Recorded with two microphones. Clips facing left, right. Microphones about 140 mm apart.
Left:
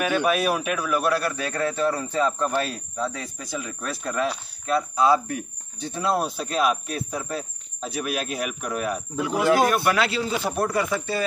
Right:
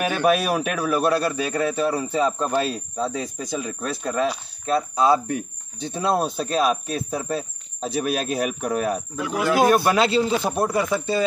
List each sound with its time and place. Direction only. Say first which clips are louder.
0.2 s a man's voice: right 3 dB; 35° right (ahead or behind)
9.1 s speech: left 6 dB; 25° left (ahead or behind)
9.7 s a man's voice: right 4 dB; 25° right (ahead or behind)